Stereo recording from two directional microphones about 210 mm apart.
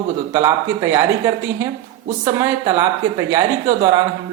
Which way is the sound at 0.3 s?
15° right (ahead or behind).